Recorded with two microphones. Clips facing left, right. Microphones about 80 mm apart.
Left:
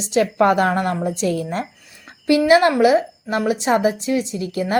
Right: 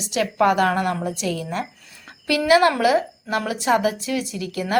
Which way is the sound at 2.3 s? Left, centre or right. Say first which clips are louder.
Left 3 dB; left.